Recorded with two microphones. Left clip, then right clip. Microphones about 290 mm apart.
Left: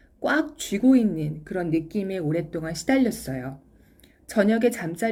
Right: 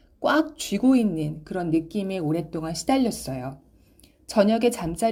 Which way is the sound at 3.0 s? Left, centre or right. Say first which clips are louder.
Left 1 dB; centre.